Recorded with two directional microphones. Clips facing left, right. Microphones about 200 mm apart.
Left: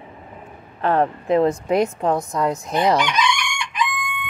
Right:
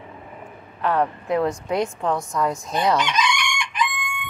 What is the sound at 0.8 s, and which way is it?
Speech, 30° left (ahead or behind).